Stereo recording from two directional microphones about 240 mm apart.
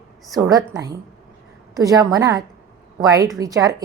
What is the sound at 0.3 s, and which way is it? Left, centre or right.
A woman's voice, centre.